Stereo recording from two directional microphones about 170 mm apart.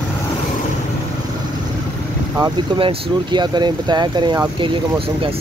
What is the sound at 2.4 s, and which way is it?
Speech, 30° right (ahead or behind).